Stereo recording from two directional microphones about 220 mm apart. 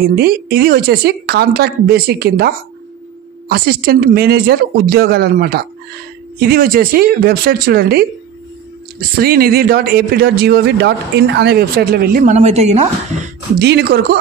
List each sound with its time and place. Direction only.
0.0 s a man's voice: 45° right (ahead or behind)
9.2 s a man's voice: 45° right (ahead or behind)
13.6 s a man's voice: 50° right (ahead or behind)